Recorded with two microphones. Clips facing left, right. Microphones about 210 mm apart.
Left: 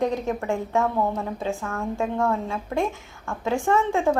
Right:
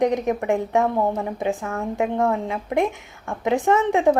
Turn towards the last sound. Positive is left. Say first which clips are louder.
# right 4 dB
turn(degrees=-15)  # may be behind; listen again after turning